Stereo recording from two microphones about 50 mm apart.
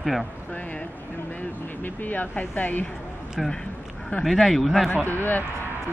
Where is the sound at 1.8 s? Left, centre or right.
Left.